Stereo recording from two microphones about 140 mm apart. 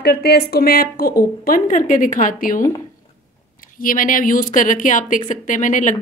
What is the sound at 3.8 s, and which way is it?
A woman's voice, 75° left (ahead or behind).